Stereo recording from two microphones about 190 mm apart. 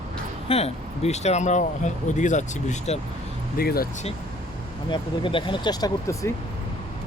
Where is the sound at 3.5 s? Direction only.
50° left (ahead or behind).